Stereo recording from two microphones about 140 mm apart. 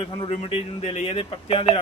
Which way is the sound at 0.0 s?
35° left (ahead or behind).